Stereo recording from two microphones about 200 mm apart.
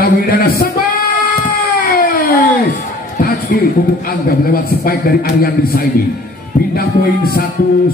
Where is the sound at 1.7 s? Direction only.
45° left (ahead or behind).